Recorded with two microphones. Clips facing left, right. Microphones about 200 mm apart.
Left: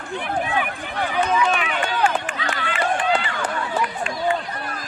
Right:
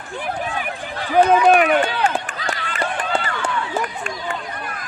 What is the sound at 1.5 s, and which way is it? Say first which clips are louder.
Run: right 10 dB; 55° right (ahead or behind).